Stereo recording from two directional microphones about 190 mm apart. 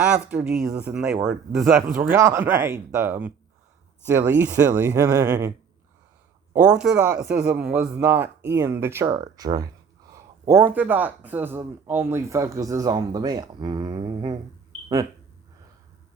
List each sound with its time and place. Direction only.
0.0 s speech: 5° right (ahead or behind)
6.5 s speech: 5° right (ahead or behind); by 14.3 s 25° right (ahead or behind)